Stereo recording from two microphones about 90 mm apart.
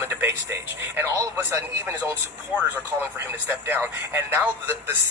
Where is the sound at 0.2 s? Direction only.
25° right (ahead or behind).